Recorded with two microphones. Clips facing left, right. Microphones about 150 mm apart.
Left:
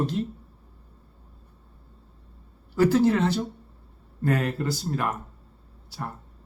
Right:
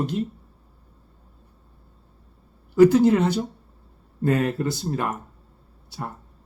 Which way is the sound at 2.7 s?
20° right (ahead or behind).